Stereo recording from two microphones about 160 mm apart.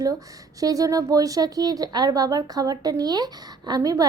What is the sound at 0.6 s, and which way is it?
A woman's voice, 20° right (ahead or behind).